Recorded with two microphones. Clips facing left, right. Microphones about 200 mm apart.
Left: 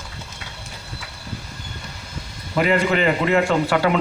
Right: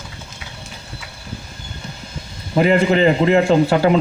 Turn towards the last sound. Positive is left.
turn(degrees=-25)  # may be behind; listen again after turning